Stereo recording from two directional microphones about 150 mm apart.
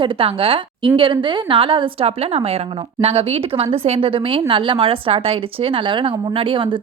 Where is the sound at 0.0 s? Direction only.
40° right (ahead or behind).